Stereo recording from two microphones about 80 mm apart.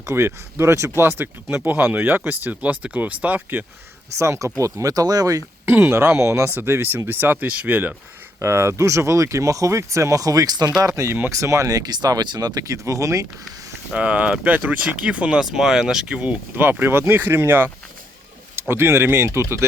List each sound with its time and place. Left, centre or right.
0.0 s speech: right
4.2 s speech: right
5.9 s speech: right
8.4 s speech: right
10.8 s speech: right
13.9 s speech: centre
16.6 s speech: right
18.7 s speech: right